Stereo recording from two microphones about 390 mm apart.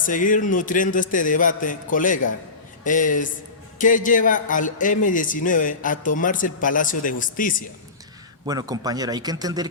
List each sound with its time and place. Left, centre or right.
0.0 s a man's voice: centre
8.4 s speech: centre